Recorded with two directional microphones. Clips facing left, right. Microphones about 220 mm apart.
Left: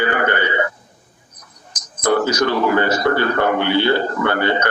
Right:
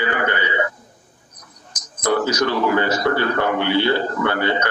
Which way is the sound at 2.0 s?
50° left (ahead or behind).